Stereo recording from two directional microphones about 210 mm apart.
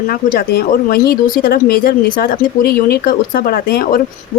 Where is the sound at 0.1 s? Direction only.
45° left (ahead or behind).